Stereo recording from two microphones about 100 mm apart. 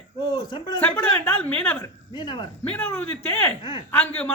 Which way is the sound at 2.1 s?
45° left (ahead or behind).